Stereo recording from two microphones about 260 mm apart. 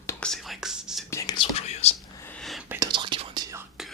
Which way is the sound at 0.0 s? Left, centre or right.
Centre.